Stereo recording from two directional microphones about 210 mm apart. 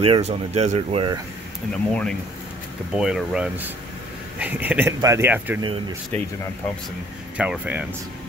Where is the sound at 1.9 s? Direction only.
5° left (ahead or behind).